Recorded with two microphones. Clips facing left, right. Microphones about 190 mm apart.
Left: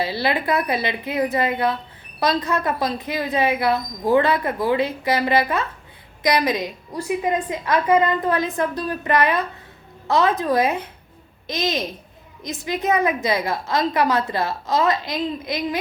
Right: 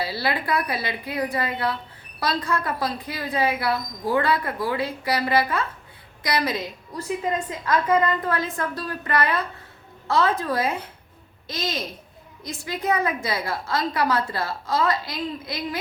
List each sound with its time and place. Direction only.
0.0 s a woman's voice: 20° left (ahead or behind)